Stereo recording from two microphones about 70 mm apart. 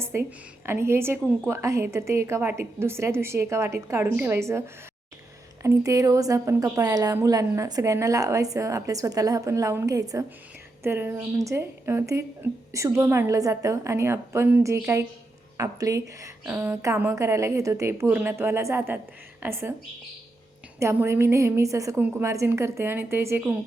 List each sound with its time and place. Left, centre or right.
0.0 s a sound: right
0.6 s a woman's voice: right
5.6 s a woman's voice: right
7.8 s a woman's voice: right
10.8 s a woman's voice: right
11.3 s a woman's voice: right
15.5 s a woman's voice: right
16.5 s a woman's voice: right
17.2 s a woman's voice: right
20.7 s a woman's voice: right
21.9 s a woman's voice: right